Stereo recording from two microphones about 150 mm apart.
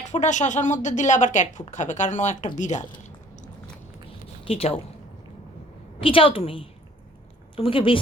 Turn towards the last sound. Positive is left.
turn(degrees=35)  # may be behind; listen again after turning